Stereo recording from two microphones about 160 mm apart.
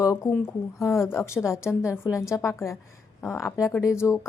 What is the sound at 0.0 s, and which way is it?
A woman's voice, 20° left (ahead or behind).